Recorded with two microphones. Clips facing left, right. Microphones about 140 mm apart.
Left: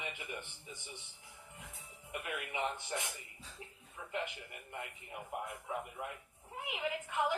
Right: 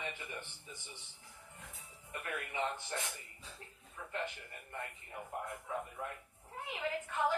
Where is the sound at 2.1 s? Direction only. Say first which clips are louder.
Left 1 dB; 15° left (ahead or behind).